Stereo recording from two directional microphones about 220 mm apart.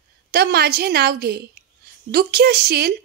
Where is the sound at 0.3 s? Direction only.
45° right (ahead or behind).